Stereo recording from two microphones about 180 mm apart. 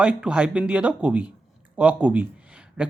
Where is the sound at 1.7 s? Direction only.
5° right (ahead or behind).